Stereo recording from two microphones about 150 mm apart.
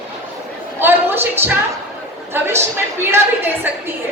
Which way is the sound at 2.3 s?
15° right (ahead or behind).